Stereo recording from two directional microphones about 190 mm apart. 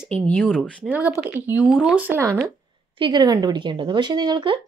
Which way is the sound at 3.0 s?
25° right (ahead or behind).